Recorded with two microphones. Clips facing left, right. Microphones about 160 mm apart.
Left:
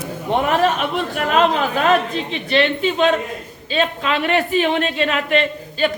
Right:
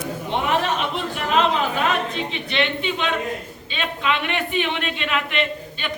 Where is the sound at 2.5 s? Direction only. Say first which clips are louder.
Left 7 dB; 40° left (ahead or behind).